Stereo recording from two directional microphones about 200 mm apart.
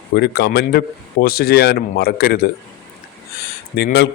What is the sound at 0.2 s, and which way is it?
A man's voice, 50° left (ahead or behind).